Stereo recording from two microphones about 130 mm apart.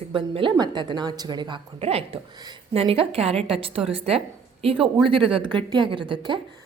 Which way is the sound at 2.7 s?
45° right (ahead or behind).